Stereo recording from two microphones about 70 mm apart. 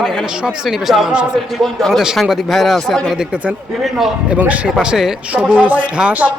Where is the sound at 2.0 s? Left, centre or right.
Centre.